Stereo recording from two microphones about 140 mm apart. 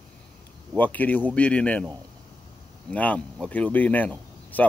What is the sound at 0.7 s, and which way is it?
Speech, 10° left (ahead or behind).